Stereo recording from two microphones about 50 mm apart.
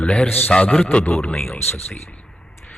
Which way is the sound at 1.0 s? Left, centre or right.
Left.